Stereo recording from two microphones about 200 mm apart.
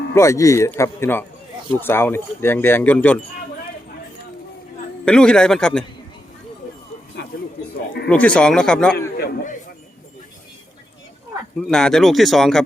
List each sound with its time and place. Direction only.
0.1 s speech: 15° left (ahead or behind)
5.0 s speech: 5° left (ahead or behind)
8.1 s speech: 5° left (ahead or behind)
9.1 s a man's voice: 45° left (ahead or behind)
11.7 s speech: 5° left (ahead or behind)